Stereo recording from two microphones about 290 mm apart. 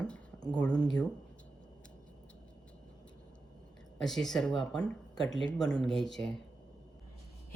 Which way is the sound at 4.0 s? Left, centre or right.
Centre.